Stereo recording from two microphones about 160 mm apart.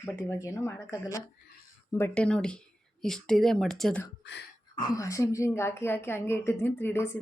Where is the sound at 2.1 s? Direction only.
5° left (ahead or behind).